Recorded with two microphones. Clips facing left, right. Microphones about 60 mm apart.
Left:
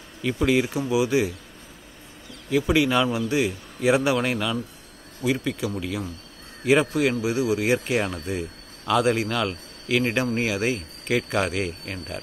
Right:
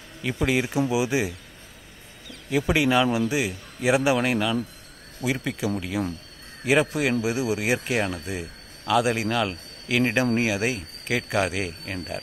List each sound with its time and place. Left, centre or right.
0.4 s speech: centre
2.5 s a man's voice: centre